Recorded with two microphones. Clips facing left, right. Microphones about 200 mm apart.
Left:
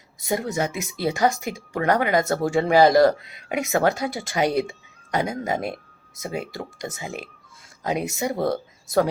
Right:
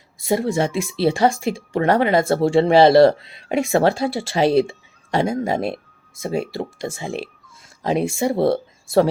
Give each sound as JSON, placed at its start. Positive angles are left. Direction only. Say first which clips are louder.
{"t": 0.2, "sound": "speech", "louder": "right 5 dB", "side_deg": -25}